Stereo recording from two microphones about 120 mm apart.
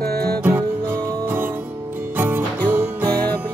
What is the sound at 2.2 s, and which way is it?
Music, 15° right (ahead or behind).